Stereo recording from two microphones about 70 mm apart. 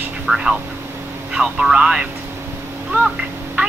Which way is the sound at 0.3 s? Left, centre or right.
Centre.